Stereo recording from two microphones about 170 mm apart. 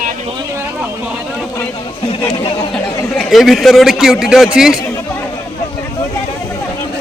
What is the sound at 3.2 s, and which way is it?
A man's voice, centre (ahead or behind).